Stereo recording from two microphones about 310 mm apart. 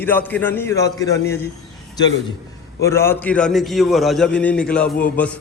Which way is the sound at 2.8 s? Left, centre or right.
Centre.